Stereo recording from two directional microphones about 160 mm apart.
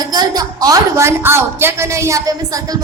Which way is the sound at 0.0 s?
25° right (ahead or behind).